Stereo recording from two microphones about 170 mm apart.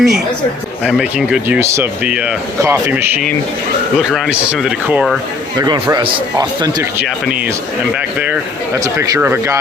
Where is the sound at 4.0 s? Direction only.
Centre (ahead or behind).